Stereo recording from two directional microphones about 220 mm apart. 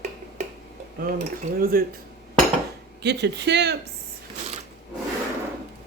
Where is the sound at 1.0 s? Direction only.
40° right (ahead or behind).